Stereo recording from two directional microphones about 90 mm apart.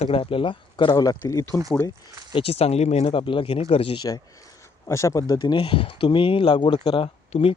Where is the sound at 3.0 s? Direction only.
75° left (ahead or behind); by 4.1 s 90° left.